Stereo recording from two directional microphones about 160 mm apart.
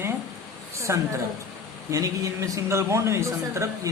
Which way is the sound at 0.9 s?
15° right (ahead or behind).